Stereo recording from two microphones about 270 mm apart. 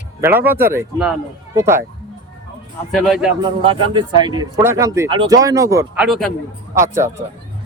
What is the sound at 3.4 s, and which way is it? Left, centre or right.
Speech, centre.